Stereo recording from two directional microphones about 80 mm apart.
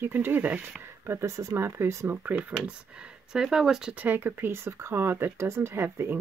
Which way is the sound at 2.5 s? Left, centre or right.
Centre.